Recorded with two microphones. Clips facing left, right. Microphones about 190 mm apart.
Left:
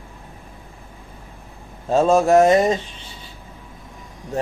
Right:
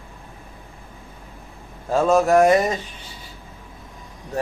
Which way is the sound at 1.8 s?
25° left (ahead or behind).